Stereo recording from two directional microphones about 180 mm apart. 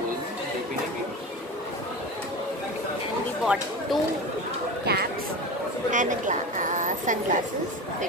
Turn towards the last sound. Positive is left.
turn(degrees=-45)  # may be behind; listen again after turning